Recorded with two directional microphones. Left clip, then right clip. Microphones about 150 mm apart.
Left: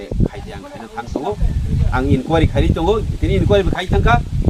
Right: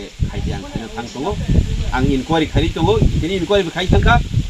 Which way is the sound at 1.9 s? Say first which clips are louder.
Even; 10° left (ahead or behind).